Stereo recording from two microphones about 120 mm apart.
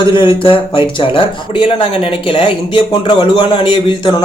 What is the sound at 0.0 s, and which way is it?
A man's voice, 40° left (ahead or behind).